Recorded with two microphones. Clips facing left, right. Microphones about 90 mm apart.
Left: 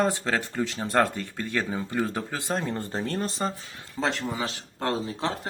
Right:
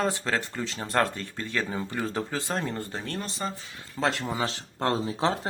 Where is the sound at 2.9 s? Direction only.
40° left (ahead or behind).